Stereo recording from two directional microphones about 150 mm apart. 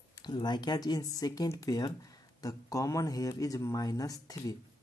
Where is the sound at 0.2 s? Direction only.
30° left (ahead or behind).